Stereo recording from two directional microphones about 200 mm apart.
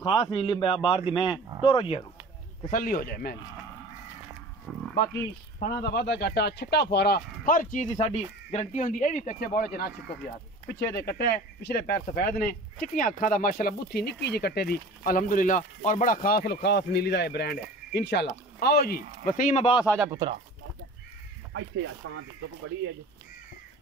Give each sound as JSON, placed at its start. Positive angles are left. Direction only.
{"t": 0.0, "sound": "a man's voice", "side_deg": 25}
{"t": 2.7, "sound": "speech", "side_deg": 45}
{"t": 4.7, "sound": "livestock", "side_deg": 0}
{"t": 5.6, "sound": "speech", "side_deg": 50}
{"t": 10.8, "sound": "speech", "side_deg": 55}
{"t": 20.1, "sound": "speech", "side_deg": -20}
{"t": 21.5, "sound": "speech", "side_deg": -75}